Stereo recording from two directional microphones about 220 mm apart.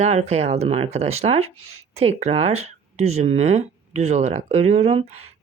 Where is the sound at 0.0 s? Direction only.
30° right (ahead or behind).